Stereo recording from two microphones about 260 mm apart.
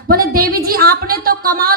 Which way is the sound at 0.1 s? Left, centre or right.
Right.